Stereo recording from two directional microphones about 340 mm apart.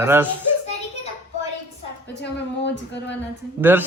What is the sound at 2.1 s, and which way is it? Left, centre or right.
Speech, left.